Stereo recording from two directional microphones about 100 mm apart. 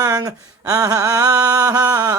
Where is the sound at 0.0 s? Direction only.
40° right (ahead or behind).